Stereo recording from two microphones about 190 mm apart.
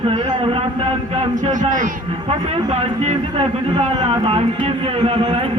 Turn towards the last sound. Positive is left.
turn(degrees=-30)  # may be behind; listen again after turning